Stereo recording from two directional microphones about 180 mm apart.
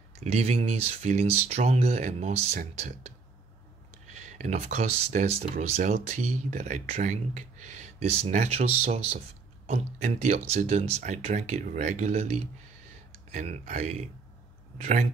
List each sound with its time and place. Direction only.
0.2 s speech: 35° right (ahead or behind)
4.1 s speech: 40° right (ahead or behind)